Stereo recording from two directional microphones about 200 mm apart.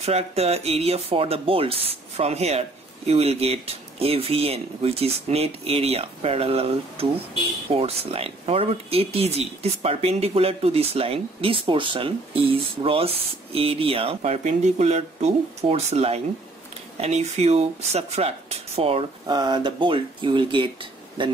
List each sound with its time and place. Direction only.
0.0 s speech: 30° right (ahead or behind)